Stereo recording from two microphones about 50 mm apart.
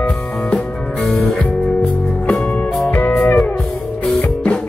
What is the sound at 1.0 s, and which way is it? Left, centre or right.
Music, centre.